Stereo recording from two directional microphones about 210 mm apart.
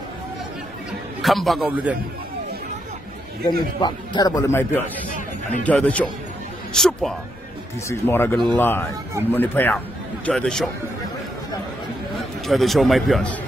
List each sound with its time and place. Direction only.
1.2 s speech: centre (ahead or behind)
3.8 s speech: 20° left (ahead or behind)
5.1 s a sound: 40° left (ahead or behind)
5.7 s speech: 5° left (ahead or behind)
12.4 s speech: centre (ahead or behind)